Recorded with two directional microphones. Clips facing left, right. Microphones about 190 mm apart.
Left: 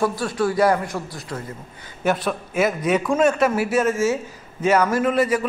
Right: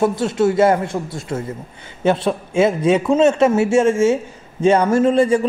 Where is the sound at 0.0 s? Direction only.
25° right (ahead or behind).